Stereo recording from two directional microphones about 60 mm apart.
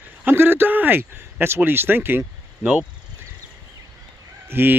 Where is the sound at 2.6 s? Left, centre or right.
Right.